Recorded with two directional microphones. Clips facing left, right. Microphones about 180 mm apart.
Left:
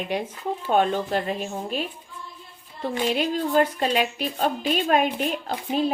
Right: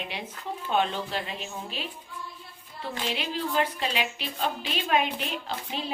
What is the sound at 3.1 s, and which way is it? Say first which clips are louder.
A woman's voice: left 7 dB; 45° left (ahead or behind).